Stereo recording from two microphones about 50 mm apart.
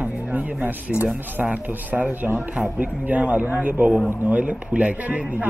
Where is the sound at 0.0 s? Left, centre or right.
Right.